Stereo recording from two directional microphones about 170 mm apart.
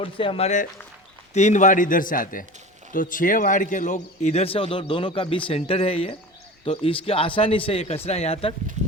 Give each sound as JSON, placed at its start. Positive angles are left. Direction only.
{"t": 0.0, "sound": "a man's voice", "side_deg": 30}